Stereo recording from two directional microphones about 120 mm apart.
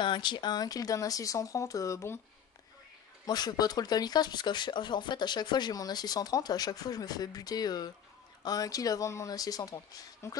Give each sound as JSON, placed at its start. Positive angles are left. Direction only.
{"t": 0.0, "sound": "speech", "side_deg": 40}
{"t": 3.3, "sound": "speech", "side_deg": 35}